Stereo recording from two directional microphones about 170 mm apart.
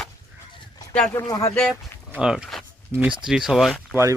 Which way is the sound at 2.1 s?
5° right (ahead or behind).